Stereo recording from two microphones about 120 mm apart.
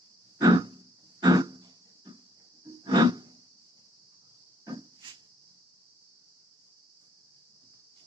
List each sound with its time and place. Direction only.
0.3 s grunt: 35° right (ahead or behind)
2.6 s wild animals: 35° right (ahead or behind)
4.6 s a sound: 35° right (ahead or behind)